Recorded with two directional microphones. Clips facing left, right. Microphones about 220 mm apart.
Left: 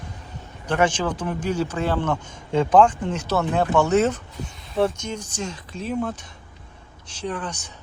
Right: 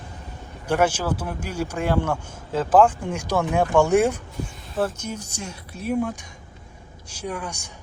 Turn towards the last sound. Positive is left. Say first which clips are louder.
# left 1 dB
turn(degrees=-10)  # may be behind; listen again after turning